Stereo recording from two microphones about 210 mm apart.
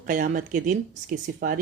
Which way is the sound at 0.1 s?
40° right (ahead or behind).